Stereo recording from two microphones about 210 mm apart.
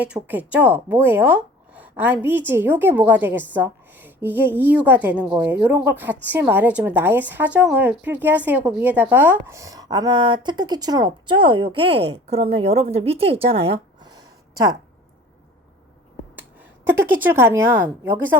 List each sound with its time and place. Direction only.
0.0 s a woman's voice: 5° right (ahead or behind)
16.8 s speech: 10° right (ahead or behind)